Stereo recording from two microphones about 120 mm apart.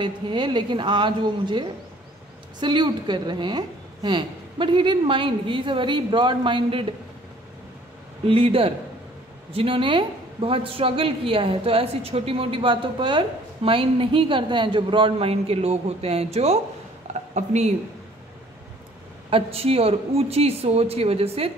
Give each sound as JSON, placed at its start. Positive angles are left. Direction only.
{"t": 0.0, "sound": "a woman's voice", "side_deg": -40}
{"t": 8.3, "sound": "a woman's voice", "side_deg": -50}
{"t": 17.1, "sound": "speech", "side_deg": -75}
{"t": 19.3, "sound": "speech", "side_deg": -55}